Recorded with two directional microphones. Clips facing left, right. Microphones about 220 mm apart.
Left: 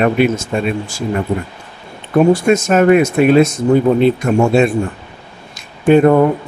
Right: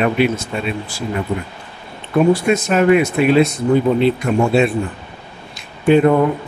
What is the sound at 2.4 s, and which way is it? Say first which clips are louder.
Speech: left 3 dB; 45° left (ahead or behind).